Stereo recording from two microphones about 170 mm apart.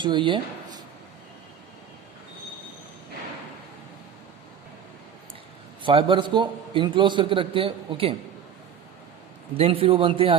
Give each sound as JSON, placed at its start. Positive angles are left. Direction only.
{"t": 0.0, "sound": "speech", "side_deg": -30}
{"t": 5.8, "sound": "a man's voice", "side_deg": -30}
{"t": 9.6, "sound": "a man's voice", "side_deg": -35}